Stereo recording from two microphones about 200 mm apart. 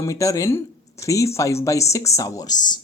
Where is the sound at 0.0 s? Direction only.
15° left (ahead or behind).